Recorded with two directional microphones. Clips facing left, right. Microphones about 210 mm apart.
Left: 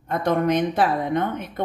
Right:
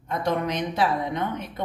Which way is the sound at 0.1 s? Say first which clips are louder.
Left 5 dB; 50° left (ahead or behind).